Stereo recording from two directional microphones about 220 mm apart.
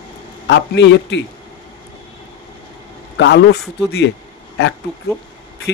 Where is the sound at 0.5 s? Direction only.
55° left (ahead or behind).